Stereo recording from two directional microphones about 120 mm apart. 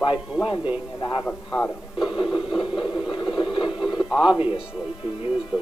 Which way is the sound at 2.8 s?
10° right (ahead or behind).